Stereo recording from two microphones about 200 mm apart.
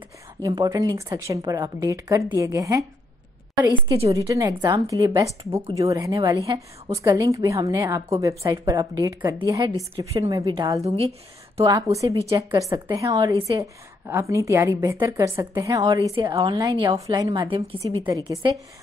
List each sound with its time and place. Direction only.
0.4 s a woman's voice: 20° right (ahead or behind)
4.1 s a woman's voice: 15° right (ahead or behind)
11.6 s a woman's voice: 15° right (ahead or behind)